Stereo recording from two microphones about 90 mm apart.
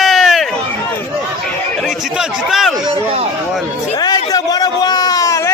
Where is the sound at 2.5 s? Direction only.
5° right (ahead or behind).